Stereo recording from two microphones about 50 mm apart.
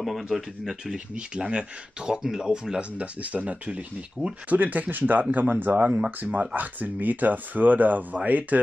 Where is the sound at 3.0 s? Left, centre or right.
Right.